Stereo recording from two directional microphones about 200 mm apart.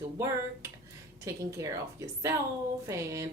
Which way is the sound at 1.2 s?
15° right (ahead or behind).